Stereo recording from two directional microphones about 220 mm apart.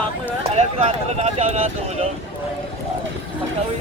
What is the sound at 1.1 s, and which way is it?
Speech, 30° right (ahead or behind).